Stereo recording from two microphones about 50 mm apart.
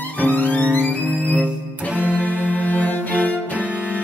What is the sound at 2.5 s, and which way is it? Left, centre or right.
Cello, left.